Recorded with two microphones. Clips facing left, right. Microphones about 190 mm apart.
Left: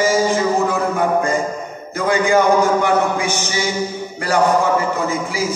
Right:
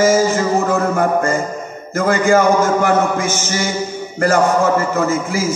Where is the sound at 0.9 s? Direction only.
45° right (ahead or behind).